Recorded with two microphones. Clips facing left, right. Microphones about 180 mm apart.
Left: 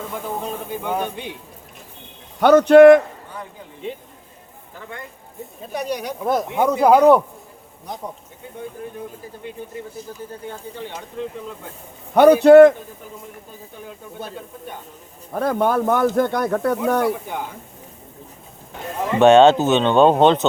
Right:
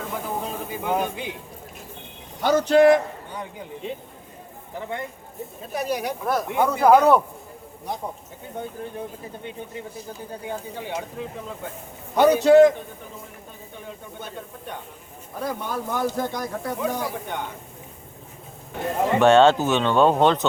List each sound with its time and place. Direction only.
0.7 s speech: centre (ahead or behind)
2.4 s speech: 60° left (ahead or behind)
4.8 s speech: 20° right (ahead or behind)
5.7 s speech: 5° right (ahead or behind)
6.2 s speech: 20° left (ahead or behind)
10.4 s speech: 10° right (ahead or behind)
12.1 s speech: 60° left (ahead or behind)
15.3 s speech: 60° left (ahead or behind)
19.2 s speech: 20° left (ahead or behind)